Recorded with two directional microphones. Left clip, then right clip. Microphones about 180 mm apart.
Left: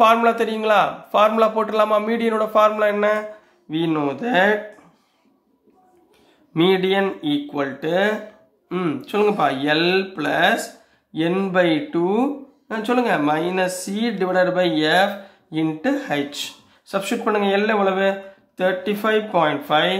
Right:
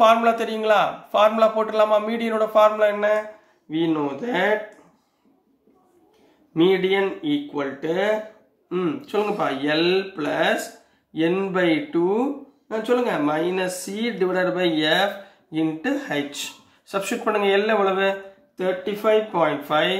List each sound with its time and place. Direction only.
0.0 s speech: 20° left (ahead or behind)
3.7 s speech: 40° left (ahead or behind)
6.5 s speech: 35° left (ahead or behind)
18.6 s speech: 35° left (ahead or behind)